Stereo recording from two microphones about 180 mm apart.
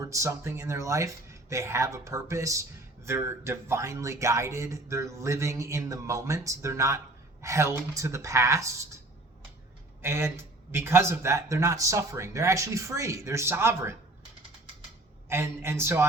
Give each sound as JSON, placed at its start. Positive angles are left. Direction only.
{"t": 0.0, "sound": "speech", "side_deg": -15}
{"t": 10.0, "sound": "speech", "side_deg": -15}
{"t": 15.3, "sound": "speech", "side_deg": -15}